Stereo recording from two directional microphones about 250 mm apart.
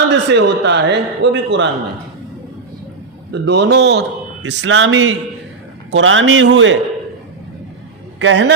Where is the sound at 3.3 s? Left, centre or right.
Right.